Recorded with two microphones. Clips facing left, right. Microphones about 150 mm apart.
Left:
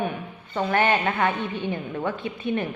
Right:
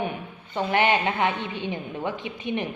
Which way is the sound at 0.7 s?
20° right (ahead or behind).